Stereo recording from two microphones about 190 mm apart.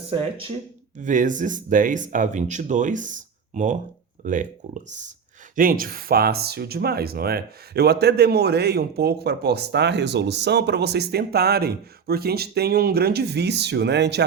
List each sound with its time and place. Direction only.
0.1 s speech: 30° right (ahead or behind)
0.9 s speech: 40° right (ahead or behind); by 14.3 s 60° right (ahead or behind)